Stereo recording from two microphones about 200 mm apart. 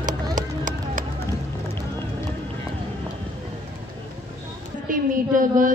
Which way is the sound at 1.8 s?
10° left (ahead or behind).